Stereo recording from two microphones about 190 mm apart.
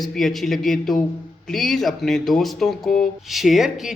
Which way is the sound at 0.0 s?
Centre (ahead or behind).